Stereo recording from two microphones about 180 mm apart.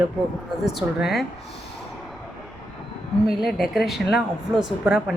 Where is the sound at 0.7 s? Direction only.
Centre (ahead or behind).